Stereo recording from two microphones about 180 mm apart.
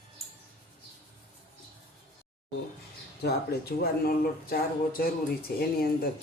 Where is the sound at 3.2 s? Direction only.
60° left (ahead or behind).